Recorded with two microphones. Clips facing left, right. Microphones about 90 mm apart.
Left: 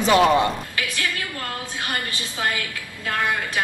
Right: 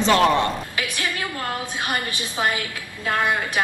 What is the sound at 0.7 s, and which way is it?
Music, 20° right (ahead or behind).